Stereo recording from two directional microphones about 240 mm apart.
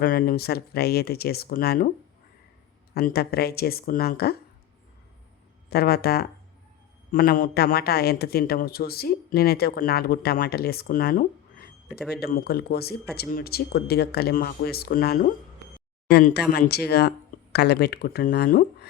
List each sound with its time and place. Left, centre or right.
0.0 s a man's voice: left
2.9 s a man's voice: left
5.7 s a man's voice: left